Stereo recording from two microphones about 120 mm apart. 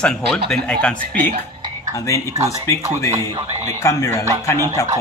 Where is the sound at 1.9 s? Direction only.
25° left (ahead or behind).